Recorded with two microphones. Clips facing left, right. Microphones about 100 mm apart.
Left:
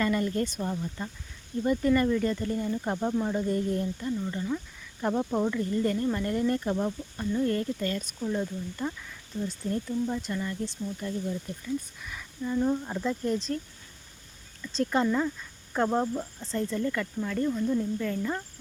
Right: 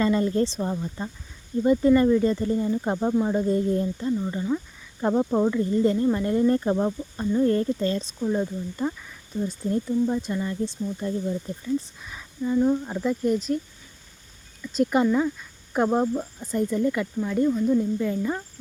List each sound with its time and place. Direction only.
0.0 s speech: 25° right (ahead or behind)
12.5 s speech: 5° right (ahead or behind)
14.6 s speech: 10° right (ahead or behind)